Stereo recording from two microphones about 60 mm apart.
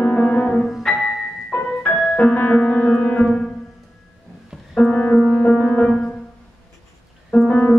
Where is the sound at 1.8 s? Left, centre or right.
Centre.